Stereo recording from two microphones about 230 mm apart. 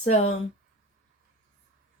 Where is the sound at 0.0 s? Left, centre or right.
Left.